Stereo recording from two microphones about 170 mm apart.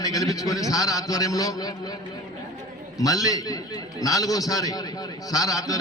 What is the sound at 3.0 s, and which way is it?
A man's voice, 20° left (ahead or behind).